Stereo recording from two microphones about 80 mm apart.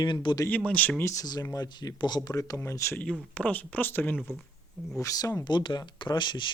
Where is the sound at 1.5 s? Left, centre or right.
Left.